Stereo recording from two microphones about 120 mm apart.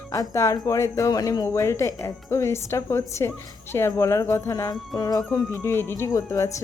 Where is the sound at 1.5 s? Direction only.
20° left (ahead or behind).